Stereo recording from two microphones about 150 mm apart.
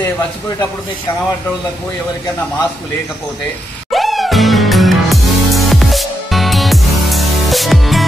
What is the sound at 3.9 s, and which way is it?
Music, centre (ahead or behind).